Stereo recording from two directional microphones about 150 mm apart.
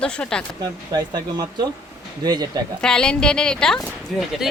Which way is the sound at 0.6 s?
25° right (ahead or behind).